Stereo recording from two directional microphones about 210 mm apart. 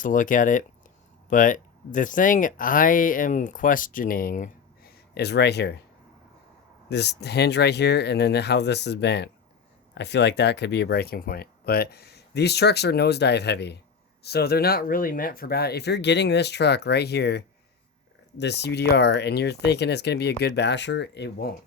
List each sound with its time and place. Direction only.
0.0 s speech: 40° left (ahead or behind)
6.9 s speech: 50° left (ahead or behind)